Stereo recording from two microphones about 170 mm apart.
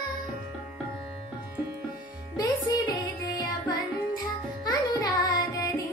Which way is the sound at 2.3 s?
20° left (ahead or behind).